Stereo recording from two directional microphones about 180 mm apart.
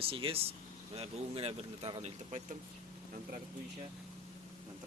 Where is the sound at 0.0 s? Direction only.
30° right (ahead or behind).